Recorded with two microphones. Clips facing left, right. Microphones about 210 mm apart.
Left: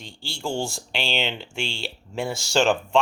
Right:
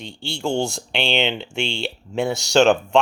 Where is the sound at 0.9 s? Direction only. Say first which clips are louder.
Right 6 dB; 60° right (ahead or behind).